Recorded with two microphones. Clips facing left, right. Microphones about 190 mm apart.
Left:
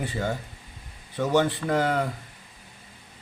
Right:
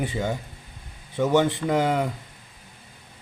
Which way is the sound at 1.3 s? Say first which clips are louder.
Right 1 dB; 20° right (ahead or behind).